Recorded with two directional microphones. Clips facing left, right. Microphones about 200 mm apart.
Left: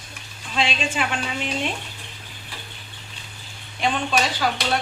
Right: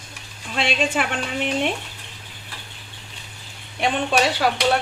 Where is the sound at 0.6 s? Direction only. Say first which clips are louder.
Right 2 dB; 60° right (ahead or behind).